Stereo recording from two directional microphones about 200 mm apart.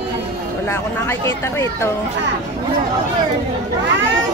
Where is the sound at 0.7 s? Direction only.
15° left (ahead or behind).